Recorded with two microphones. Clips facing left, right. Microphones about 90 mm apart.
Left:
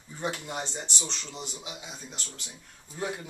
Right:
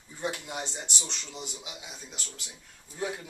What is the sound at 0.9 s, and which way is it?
Speech, 20° left (ahead or behind).